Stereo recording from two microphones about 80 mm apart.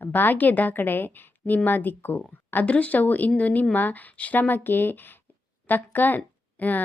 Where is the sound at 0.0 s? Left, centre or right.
Left.